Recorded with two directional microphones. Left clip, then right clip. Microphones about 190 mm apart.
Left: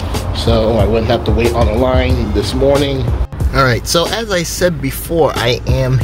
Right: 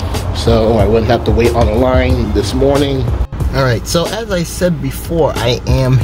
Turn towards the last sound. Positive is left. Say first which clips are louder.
# right 1 dB
turn(degrees=-20)  # may be behind; listen again after turning